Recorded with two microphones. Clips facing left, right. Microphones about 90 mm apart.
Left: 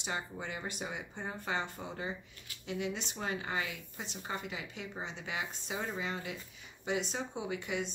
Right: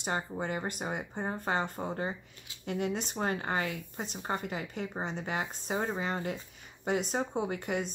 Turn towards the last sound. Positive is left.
turn(degrees=-45)  # may be behind; listen again after turning